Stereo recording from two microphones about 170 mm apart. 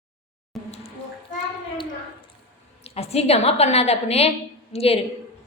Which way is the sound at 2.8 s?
35° left (ahead or behind).